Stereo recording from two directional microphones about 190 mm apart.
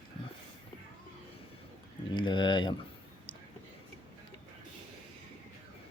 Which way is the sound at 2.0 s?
25° left (ahead or behind).